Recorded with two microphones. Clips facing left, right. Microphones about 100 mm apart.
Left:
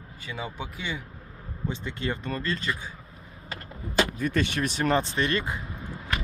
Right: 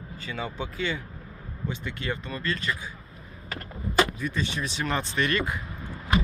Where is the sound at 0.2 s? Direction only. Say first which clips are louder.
Right 2 dB; 10° left (ahead or behind).